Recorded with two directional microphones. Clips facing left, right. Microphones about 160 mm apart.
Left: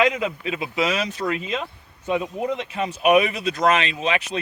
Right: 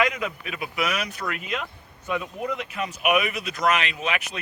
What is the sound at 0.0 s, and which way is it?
Speech, 25° left (ahead or behind).